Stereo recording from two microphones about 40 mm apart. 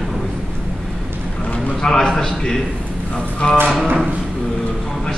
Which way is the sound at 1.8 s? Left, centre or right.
Centre.